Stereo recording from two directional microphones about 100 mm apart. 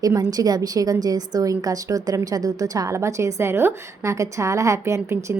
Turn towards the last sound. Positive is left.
turn(degrees=-30)  # may be behind; listen again after turning